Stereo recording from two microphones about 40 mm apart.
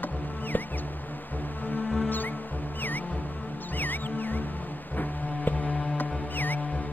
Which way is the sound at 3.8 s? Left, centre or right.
Left.